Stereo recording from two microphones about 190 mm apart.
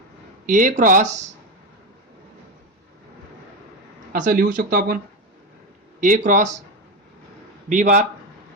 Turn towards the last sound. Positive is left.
turn(degrees=-40)  # may be behind; listen again after turning